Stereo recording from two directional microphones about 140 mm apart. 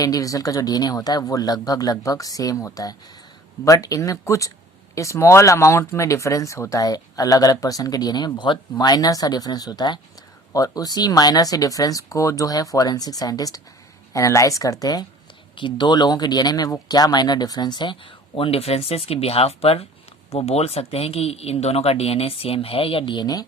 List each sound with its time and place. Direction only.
0.0 s speech: 25° left (ahead or behind)